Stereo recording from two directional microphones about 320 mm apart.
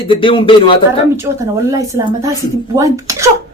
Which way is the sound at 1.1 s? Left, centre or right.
Centre.